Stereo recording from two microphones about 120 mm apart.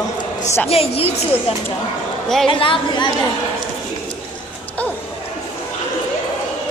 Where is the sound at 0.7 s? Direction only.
55° left (ahead or behind).